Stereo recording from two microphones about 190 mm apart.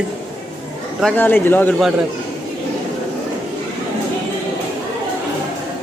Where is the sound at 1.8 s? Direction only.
Centre (ahead or behind).